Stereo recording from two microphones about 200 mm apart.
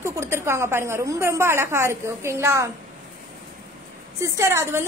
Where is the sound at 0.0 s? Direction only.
10° right (ahead or behind).